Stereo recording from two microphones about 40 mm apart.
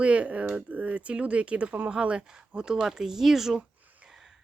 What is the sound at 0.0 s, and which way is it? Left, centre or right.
Speech, right.